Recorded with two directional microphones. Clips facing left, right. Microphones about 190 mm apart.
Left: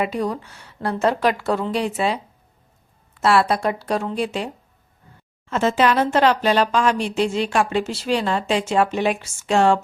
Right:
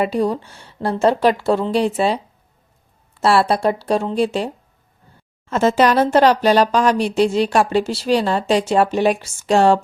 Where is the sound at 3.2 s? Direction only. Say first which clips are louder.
Right 2 dB; 30° right (ahead or behind).